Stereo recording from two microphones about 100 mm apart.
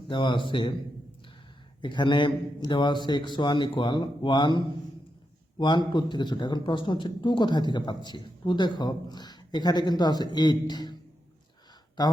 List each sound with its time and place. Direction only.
0.1 s speech: 55° left (ahead or behind)
1.8 s speech: 50° left (ahead or behind)